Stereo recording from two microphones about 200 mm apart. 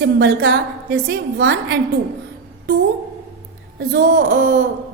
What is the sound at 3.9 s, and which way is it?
Speech, 60° right (ahead or behind).